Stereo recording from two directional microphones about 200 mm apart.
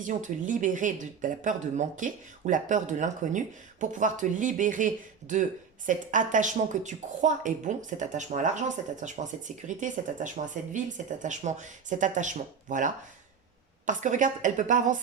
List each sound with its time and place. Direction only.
0.0 s speech: 40° right (ahead or behind)